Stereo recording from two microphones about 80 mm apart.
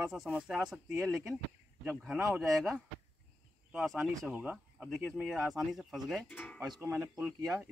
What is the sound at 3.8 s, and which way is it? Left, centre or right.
Speech, centre.